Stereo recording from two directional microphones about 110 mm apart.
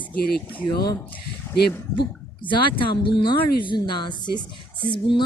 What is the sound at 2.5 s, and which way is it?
Speech, 50° left (ahead or behind).